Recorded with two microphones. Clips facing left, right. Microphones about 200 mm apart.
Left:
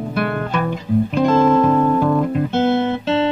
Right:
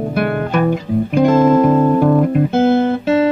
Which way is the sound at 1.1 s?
10° right (ahead or behind).